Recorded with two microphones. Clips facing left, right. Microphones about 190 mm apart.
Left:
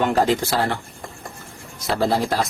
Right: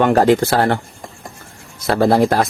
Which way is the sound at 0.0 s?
65° right (ahead or behind).